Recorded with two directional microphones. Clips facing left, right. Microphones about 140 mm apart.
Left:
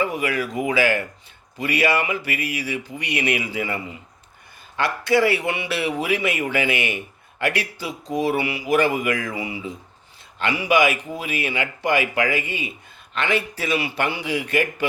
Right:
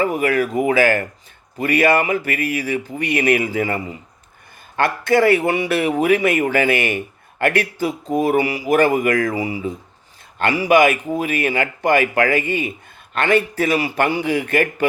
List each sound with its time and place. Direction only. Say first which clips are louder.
0.0 s a man's voice: right 5 dB; 45° right (ahead or behind)